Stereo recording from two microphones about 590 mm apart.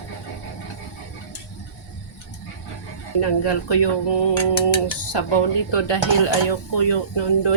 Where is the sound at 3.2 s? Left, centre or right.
Left.